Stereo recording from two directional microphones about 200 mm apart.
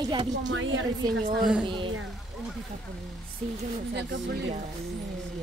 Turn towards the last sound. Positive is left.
turn(degrees=-60)  # may be behind; listen again after turning